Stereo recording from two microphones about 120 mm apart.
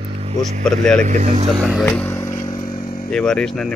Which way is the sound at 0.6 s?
5° left (ahead or behind).